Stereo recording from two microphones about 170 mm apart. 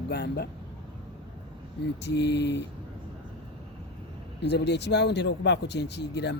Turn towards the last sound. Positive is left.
turn(degrees=90)